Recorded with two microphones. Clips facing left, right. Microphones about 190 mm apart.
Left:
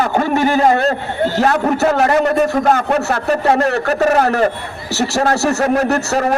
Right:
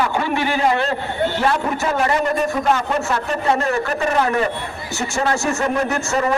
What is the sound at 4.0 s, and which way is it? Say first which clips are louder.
Speech: left 7 dB; 45° left (ahead or behind).